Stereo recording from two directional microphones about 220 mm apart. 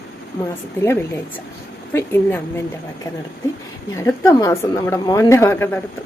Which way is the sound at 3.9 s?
15° left (ahead or behind).